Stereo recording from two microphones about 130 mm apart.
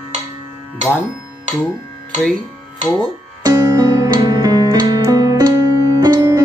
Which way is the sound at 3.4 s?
30° right (ahead or behind).